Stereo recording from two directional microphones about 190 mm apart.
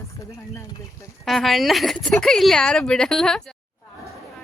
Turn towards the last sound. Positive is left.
turn(degrees=5)  # may be behind; listen again after turning